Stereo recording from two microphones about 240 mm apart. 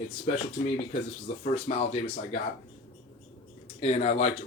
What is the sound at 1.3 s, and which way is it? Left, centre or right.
Speech, left.